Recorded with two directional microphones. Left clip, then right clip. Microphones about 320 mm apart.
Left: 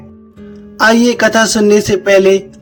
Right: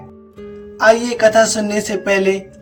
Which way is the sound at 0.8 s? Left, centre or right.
Centre.